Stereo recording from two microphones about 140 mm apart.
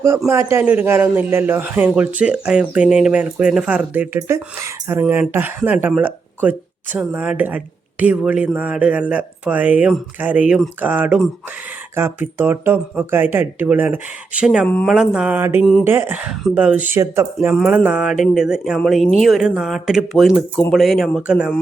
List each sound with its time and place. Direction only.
0.5 s speech: 10° right (ahead or behind)
17.8 s speech: 10° right (ahead or behind)